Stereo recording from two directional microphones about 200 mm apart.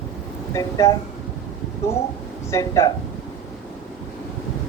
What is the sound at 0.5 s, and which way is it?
Speech, 15° left (ahead or behind).